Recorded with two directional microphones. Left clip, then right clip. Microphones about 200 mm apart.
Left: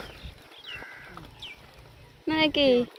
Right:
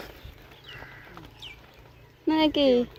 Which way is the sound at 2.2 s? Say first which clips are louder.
Right 1 dB; 30° right (ahead or behind).